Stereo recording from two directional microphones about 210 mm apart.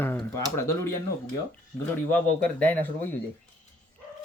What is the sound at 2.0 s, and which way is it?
Speech, 5° left (ahead or behind).